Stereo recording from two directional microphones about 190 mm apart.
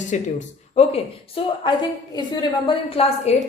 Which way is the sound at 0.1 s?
40° left (ahead or behind).